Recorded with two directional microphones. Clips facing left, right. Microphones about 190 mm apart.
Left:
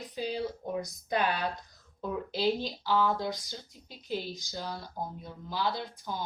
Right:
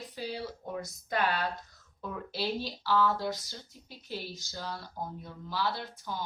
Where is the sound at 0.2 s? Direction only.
20° left (ahead or behind).